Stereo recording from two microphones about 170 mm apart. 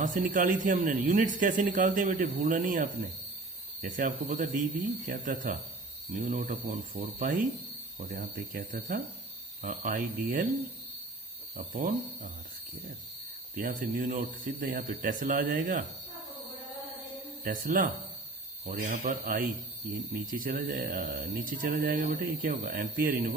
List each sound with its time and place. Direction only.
0.0 s speech: 50° right (ahead or behind)
11.5 s speech: 55° right (ahead or behind)
13.6 s speech: 60° right (ahead or behind)
17.4 s speech: 50° right (ahead or behind)